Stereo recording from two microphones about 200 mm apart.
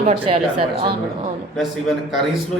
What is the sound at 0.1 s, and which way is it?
Speech, 25° right (ahead or behind).